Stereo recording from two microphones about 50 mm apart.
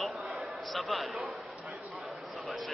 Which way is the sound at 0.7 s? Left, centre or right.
Centre.